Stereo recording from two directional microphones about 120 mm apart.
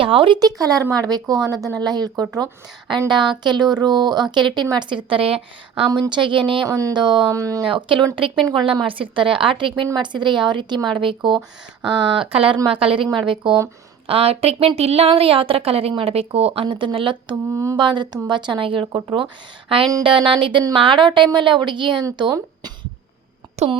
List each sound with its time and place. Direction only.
0.0 s a woman's voice: 45° right (ahead or behind)
5.9 s a woman's voice: 40° right (ahead or behind)
6.7 s speech: 25° right (ahead or behind)
7.7 s a woman's voice: 45° right (ahead or behind)
17.5 s speech: 25° right (ahead or behind)
17.7 s a woman's voice: 40° right (ahead or behind)